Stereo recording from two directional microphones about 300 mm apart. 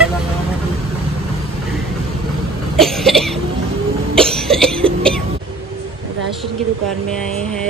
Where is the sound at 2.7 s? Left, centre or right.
Centre.